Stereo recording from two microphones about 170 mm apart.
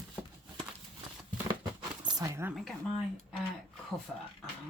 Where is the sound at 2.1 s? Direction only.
20° right (ahead or behind).